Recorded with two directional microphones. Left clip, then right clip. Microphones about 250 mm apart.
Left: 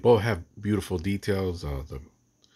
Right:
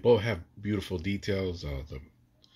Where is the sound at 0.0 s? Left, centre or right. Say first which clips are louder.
Left 3 dB; left.